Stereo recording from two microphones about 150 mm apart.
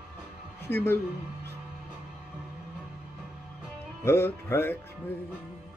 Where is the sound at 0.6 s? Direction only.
15° left (ahead or behind).